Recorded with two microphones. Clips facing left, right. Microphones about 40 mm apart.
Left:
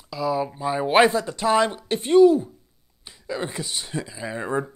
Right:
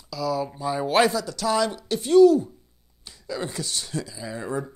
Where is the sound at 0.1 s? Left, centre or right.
Left.